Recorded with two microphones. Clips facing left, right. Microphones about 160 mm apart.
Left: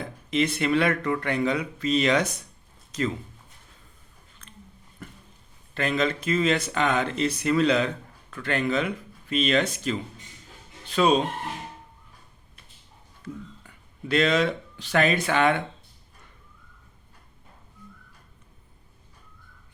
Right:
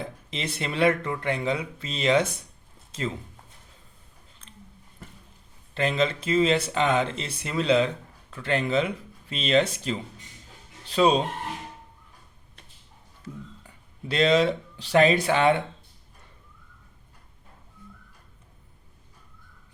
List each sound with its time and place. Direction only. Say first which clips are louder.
0.0 s speech: left 8 dB; 30° right (ahead or behind)
4.4 s a sound: left 1 dB; 30° right (ahead or behind)
5.7 s speech: right 1 dB; 25° right (ahead or behind)
13.2 s speech: left 2 dB; 30° right (ahead or behind)